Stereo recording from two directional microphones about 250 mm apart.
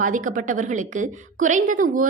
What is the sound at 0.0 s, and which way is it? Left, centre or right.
A woman's voice, right.